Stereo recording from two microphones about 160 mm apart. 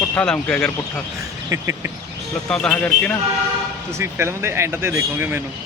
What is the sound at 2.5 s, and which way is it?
Speech, 5° left (ahead or behind).